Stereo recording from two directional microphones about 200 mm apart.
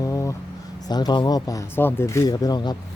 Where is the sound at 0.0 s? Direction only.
15° left (ahead or behind).